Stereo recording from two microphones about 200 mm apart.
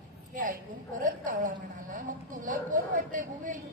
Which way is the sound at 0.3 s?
40° right (ahead or behind).